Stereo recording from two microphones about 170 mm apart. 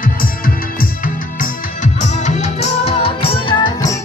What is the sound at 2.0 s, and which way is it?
Music, 40° left (ahead or behind).